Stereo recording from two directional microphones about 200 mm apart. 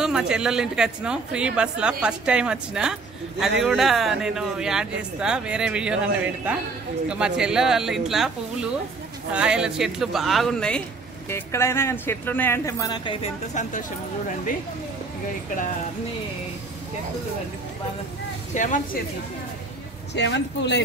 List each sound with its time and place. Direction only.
0.0 s a woman's voice: 5° right (ahead or behind)
9.3 s a woman's voice: 5° right (ahead or behind); by 13.3 s 25° left (ahead or behind)
18.5 s speech: 40° left (ahead or behind)
20.2 s speech: 60° left (ahead or behind)